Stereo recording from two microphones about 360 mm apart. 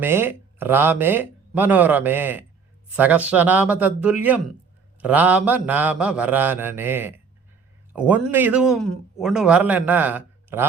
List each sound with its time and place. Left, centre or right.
0.0 s speech: centre